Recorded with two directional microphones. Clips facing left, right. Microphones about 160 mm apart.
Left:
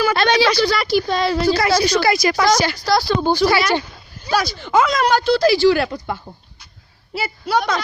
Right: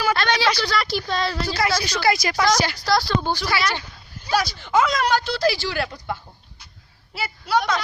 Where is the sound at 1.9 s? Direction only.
60° left (ahead or behind).